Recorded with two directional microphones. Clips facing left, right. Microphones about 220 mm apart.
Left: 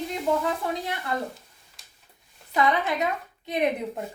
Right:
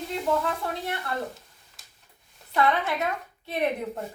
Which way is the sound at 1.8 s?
Centre (ahead or behind).